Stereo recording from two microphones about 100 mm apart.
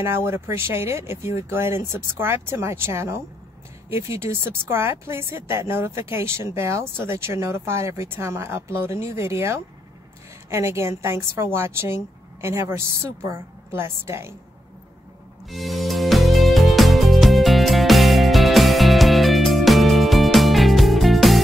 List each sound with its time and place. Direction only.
0.0 s speech: 25° right (ahead or behind)
15.5 s music: centre (ahead or behind)